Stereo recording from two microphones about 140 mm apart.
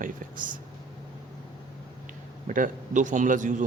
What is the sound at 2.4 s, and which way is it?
A man's voice, 70° right (ahead or behind).